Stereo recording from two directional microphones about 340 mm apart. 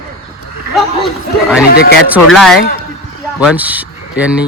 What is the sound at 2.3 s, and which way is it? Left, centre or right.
Speech, centre.